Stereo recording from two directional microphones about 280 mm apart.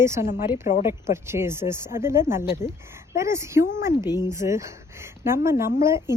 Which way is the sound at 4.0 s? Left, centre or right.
Centre.